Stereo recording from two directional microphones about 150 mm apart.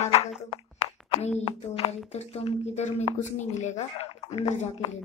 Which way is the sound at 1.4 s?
45° left (ahead or behind).